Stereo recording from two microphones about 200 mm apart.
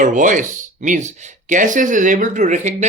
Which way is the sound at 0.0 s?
40° right (ahead or behind).